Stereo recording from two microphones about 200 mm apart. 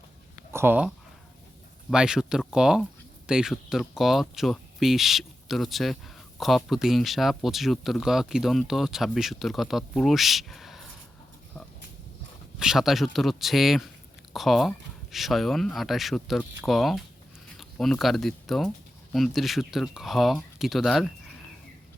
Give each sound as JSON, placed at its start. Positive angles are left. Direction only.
{"t": 0.5, "sound": "speech", "side_deg": -10}
{"t": 1.9, "sound": "speech", "side_deg": -5}
{"t": 12.5, "sound": "speech", "side_deg": 0}